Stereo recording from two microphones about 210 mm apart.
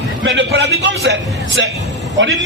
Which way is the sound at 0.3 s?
55° right (ahead or behind).